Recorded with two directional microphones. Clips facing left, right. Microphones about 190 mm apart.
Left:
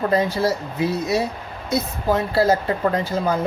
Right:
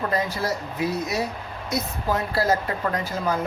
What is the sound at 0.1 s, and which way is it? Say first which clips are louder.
A woman's voice: left 6 dB; 30° left (ahead or behind).